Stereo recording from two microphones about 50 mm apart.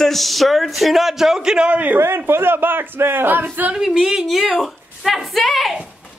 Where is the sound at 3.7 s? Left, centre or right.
Centre.